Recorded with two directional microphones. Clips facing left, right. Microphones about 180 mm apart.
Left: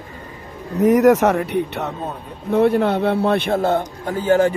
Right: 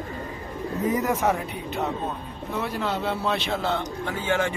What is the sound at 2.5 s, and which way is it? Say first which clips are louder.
A man's voice: left 12 dB; 60° left (ahead or behind).